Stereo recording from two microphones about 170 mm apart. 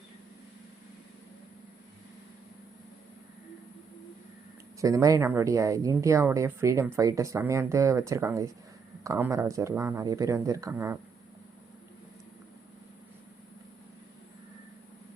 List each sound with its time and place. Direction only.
4.8 s speech: 20° right (ahead or behind)